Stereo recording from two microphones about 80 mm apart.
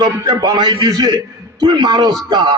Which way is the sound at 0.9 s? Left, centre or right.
Right.